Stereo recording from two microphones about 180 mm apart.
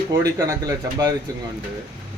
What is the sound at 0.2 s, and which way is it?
Speech, 20° right (ahead or behind).